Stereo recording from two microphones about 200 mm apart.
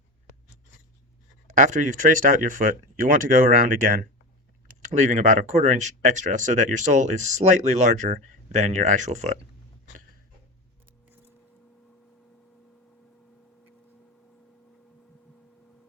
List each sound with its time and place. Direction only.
1.5 s speech: 40° right (ahead or behind)